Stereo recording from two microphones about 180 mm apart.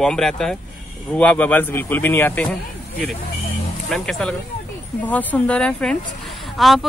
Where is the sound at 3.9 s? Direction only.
Centre (ahead or behind).